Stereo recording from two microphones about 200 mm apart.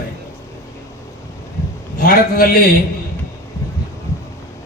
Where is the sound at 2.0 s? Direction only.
45° left (ahead or behind).